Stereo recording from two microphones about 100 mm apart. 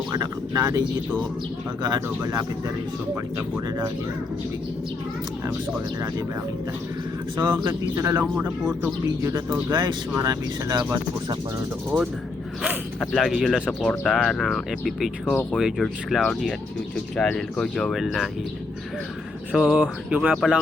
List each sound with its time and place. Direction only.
0.1 s a sound: 40° right (ahead or behind)
1.8 s speech: 40° right (ahead or behind)
7.4 s speech: 45° right (ahead or behind)
7.9 s speech: 30° right (ahead or behind)
9.2 s speech: 40° right (ahead or behind)
13.1 s speech: centre (ahead or behind)
13.8 s speech: 10° left (ahead or behind)
19.5 s speech: 10° right (ahead or behind)
20.3 s speech: centre (ahead or behind)